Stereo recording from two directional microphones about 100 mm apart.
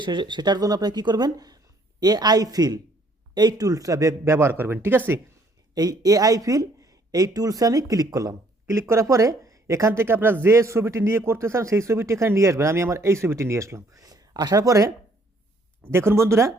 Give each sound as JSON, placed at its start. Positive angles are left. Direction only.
{"t": 0.0, "sound": "a woman's voice", "side_deg": -50}
{"t": 4.2, "sound": "speech", "side_deg": -25}
{"t": 5.7, "sound": "speech", "side_deg": -40}